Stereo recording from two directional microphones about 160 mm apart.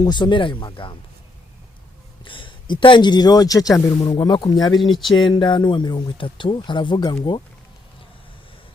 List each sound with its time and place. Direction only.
0.0 s speech: 30° left (ahead or behind)
2.2 s speech: 30° left (ahead or behind)